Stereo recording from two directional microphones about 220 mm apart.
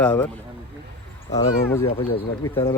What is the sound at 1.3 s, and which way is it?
Speech, 10° left (ahead or behind).